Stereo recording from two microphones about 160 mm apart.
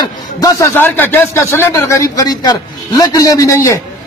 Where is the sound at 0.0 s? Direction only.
25° left (ahead or behind).